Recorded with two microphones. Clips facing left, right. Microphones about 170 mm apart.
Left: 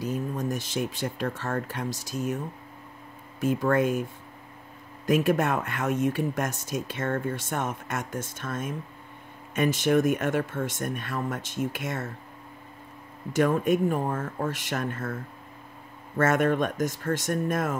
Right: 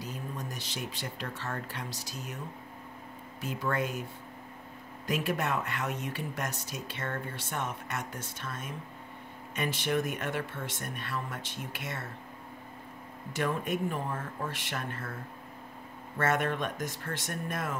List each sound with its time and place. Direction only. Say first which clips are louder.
0.0 s speech: left 10 dB; 45° left (ahead or behind)
3.3 s speech: left 9 dB; 50° left (ahead or behind)
5.0 s speech: left 8 dB; 45° left (ahead or behind)
13.3 s speech: left 9 dB; 45° left (ahead or behind)
16.2 s speech: left 7 dB; 45° left (ahead or behind)